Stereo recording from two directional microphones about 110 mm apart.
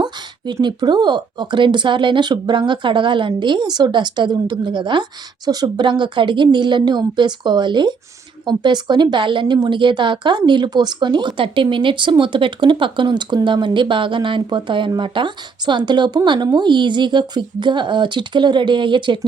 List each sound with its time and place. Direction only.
0.0 s a woman's voice: 40° right (ahead or behind)